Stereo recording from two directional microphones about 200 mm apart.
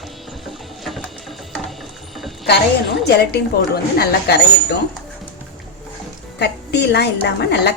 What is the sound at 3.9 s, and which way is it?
Speech, 55° left (ahead or behind).